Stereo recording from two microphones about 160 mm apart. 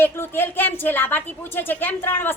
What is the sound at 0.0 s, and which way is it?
A woman's voice, 15° left (ahead or behind).